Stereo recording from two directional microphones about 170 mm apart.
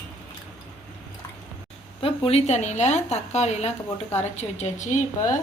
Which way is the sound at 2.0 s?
35° left (ahead or behind).